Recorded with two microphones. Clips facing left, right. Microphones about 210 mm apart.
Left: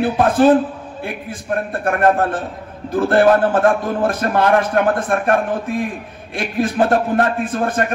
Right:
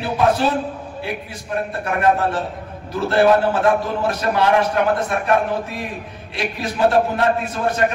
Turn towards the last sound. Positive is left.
turn(degrees=50)  # may be behind; listen again after turning